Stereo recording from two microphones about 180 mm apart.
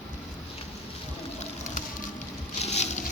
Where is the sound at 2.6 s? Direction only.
40° left (ahead or behind).